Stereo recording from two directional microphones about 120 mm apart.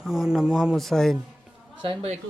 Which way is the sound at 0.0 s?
5° right (ahead or behind).